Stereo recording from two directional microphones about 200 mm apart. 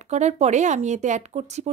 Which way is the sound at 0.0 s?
35° right (ahead or behind).